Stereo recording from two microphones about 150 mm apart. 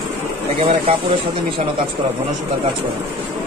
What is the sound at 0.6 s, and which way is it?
Speech, 45° right (ahead or behind).